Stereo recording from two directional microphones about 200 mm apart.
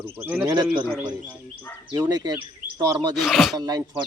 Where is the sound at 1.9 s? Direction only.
20° right (ahead or behind).